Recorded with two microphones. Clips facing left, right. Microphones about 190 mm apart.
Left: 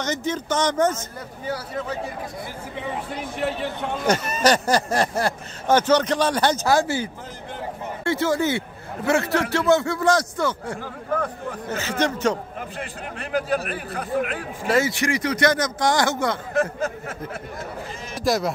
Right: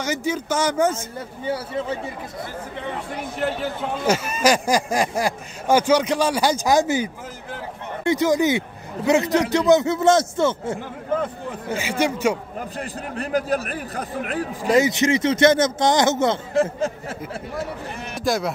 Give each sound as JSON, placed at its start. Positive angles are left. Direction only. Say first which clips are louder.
{"t": 0.0, "sound": "speech", "louder": "right 1 dB", "side_deg": -10}
{"t": 1.4, "sound": "a man's voice", "louder": "right 3 dB", "side_deg": -25}
{"t": 3.3, "sound": "speech", "louder": "right 1 dB", "side_deg": 0}
{"t": 11.7, "sound": "speech", "louder": "right 2 dB", "side_deg": -10}
{"t": 12.5, "sound": "a man's voice", "louder": "right 3 dB", "side_deg": -40}
{"t": 14.7, "sound": "a man's voice", "louder": "right 4 dB", "side_deg": -20}
{"t": 18.1, "sound": "speech", "louder": "left 1 dB", "side_deg": 0}